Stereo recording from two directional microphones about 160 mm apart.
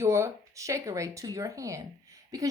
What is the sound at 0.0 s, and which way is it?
Speech, 15° right (ahead or behind).